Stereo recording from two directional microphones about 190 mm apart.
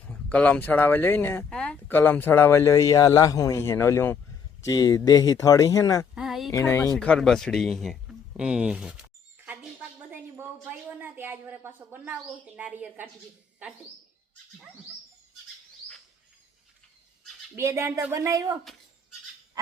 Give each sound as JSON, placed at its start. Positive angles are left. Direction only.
{"t": 0.1, "sound": "speech", "side_deg": 5}
{"t": 6.1, "sound": "a sound", "side_deg": 0}
{"t": 6.5, "sound": "speech", "side_deg": 15}
{"t": 10.1, "sound": "a sound", "side_deg": -10}
{"t": 12.5, "sound": "speech", "side_deg": -5}
{"t": 17.5, "sound": "speech", "side_deg": -15}